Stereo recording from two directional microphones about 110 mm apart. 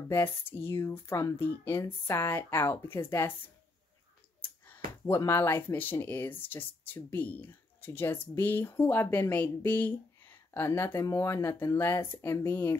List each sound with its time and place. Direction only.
0.1 s speech: 20° left (ahead or behind)
4.4 s speech: 15° left (ahead or behind)